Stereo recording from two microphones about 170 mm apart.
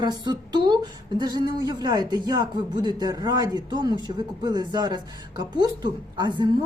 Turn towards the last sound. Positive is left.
turn(degrees=-25)  # may be behind; listen again after turning